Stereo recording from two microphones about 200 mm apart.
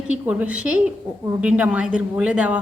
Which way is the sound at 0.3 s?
5° right (ahead or behind).